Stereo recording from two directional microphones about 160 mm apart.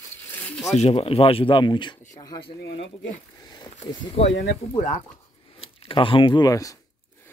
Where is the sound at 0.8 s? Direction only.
35° left (ahead or behind).